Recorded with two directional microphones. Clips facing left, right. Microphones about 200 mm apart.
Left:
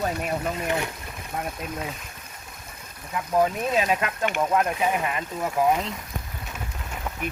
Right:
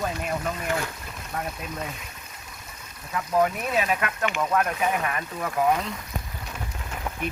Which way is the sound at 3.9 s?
25° left (ahead or behind).